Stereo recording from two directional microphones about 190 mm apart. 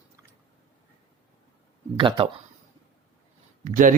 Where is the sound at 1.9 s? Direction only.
25° right (ahead or behind).